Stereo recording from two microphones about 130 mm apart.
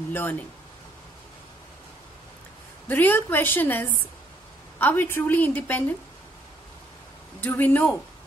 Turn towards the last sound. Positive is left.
turn(degrees=15)  # may be behind; listen again after turning